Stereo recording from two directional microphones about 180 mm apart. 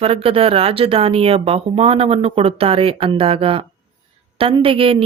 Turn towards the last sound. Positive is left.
turn(degrees=-30)  # may be behind; listen again after turning